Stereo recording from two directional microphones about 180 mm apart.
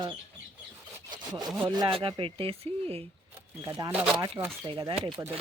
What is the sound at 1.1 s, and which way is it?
Wood, 25° right (ahead or behind).